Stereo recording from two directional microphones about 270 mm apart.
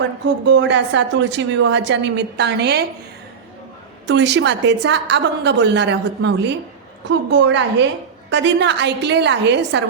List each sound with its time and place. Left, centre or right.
0.4 s a woman's voice: right
4.0 s a woman's voice: right